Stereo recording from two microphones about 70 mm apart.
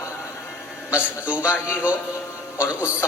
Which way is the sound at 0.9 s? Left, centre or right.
Centre.